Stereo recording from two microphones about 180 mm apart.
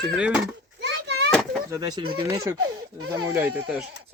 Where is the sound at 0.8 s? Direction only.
70° right (ahead or behind).